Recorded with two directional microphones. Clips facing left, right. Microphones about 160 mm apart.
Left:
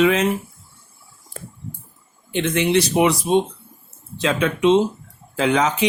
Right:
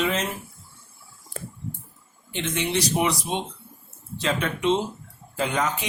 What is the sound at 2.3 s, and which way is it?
Speech, 65° left (ahead or behind).